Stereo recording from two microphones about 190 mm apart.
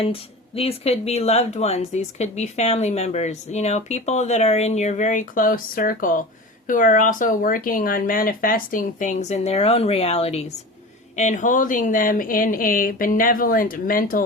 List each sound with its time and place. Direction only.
0.0 s speech: 30° left (ahead or behind); by 14.3 s 50° left (ahead or behind)